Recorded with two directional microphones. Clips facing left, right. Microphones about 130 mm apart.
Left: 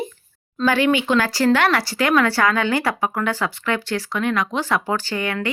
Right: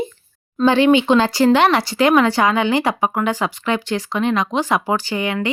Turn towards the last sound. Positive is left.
turn(degrees=-20)  # may be behind; listen again after turning